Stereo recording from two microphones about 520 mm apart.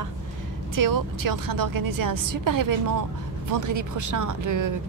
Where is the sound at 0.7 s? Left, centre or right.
Right.